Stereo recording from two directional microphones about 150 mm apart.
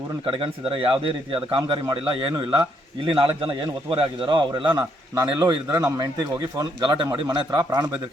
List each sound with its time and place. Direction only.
0.3 s speech: 35° right (ahead or behind)